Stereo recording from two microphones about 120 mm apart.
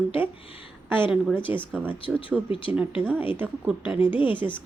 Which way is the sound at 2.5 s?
45° left (ahead or behind).